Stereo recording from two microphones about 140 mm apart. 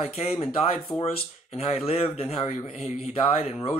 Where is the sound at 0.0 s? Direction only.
45° left (ahead or behind).